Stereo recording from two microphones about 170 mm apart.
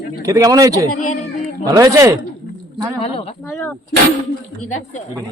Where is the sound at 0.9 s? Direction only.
50° left (ahead or behind).